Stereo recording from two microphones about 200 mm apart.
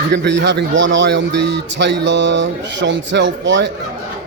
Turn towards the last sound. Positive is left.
turn(degrees=-65)  # may be behind; listen again after turning